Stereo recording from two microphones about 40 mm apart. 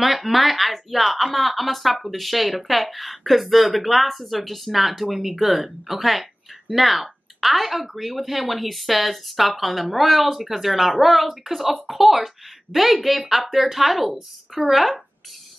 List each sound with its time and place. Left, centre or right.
0.0 s speech: centre